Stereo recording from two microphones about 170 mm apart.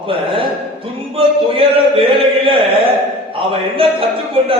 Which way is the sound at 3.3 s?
30° right (ahead or behind).